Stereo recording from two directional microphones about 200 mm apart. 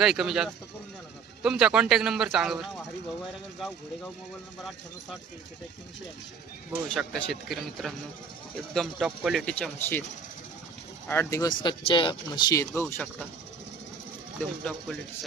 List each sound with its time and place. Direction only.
0.0 s speech: centre (ahead or behind)
6.7 s speech: 5° left (ahead or behind)
11.1 s speech: 15° left (ahead or behind)
14.6 s speech: 5° left (ahead or behind)